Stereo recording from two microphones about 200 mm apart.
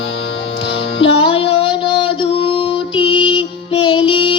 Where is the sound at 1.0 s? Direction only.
25° left (ahead or behind).